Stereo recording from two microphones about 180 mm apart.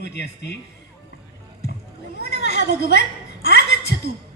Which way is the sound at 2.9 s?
70° left (ahead or behind).